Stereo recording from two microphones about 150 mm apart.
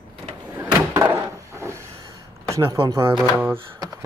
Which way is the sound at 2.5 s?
20° right (ahead or behind).